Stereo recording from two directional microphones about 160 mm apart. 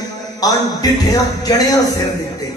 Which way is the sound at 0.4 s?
25° left (ahead or behind).